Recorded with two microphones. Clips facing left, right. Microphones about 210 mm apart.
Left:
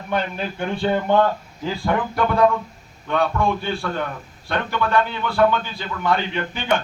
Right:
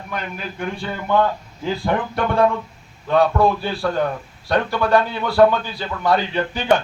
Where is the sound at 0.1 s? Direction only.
30° left (ahead or behind).